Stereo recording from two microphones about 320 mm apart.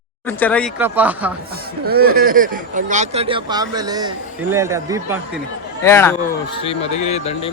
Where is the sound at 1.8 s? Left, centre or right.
Right; by 5.2 s centre.